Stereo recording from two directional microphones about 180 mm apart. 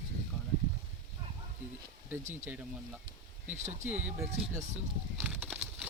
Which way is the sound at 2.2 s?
40° right (ahead or behind).